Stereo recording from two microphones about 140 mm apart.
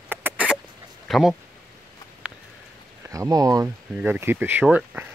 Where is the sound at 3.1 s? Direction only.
25° right (ahead or behind).